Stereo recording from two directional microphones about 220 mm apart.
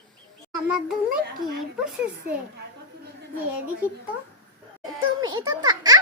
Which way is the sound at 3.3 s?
10° right (ahead or behind).